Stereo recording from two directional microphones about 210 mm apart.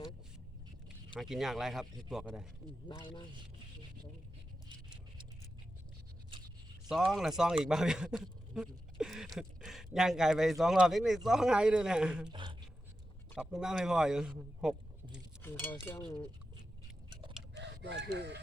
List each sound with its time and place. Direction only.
1.1 s speech: centre (ahead or behind)
6.8 s speech: centre (ahead or behind)
12.3 s speech: 20° right (ahead or behind)
13.3 s a man's voice: 5° right (ahead or behind)
15.4 s speech: 10° left (ahead or behind)
17.6 s speech: 55° right (ahead or behind)